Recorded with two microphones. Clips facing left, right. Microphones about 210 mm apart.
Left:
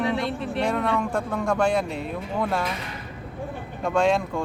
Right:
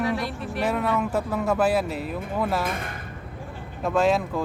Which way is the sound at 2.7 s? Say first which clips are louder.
Right 2 dB; 50° right (ahead or behind).